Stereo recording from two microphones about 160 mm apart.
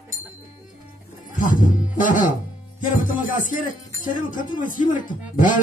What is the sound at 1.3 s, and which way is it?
Speech, 55° left (ahead or behind).